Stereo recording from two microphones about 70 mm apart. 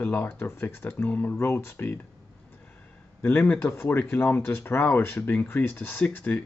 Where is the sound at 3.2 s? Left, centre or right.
Left.